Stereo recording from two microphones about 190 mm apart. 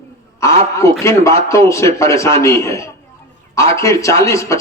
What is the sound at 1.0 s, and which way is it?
Speech, 15° left (ahead or behind).